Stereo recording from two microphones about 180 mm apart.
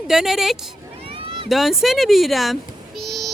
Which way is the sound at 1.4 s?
Centre (ahead or behind).